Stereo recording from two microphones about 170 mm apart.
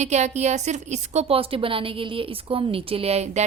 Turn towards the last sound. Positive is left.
turn(degrees=-40)  # may be behind; listen again after turning